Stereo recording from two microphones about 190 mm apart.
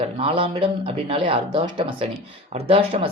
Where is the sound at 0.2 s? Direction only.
30° right (ahead or behind).